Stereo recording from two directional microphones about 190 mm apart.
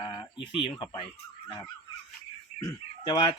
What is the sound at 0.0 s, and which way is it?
Chicken, 25° left (ahead or behind).